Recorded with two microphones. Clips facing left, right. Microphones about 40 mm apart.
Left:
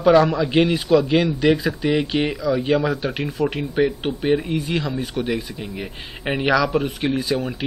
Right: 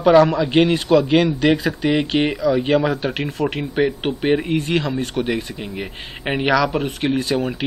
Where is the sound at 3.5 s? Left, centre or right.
Centre.